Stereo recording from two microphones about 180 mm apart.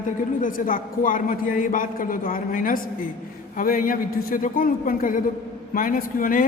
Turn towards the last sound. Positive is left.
turn(degrees=50)  # may be behind; listen again after turning